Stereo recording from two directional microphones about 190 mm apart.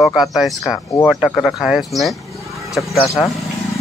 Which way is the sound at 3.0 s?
15° left (ahead or behind).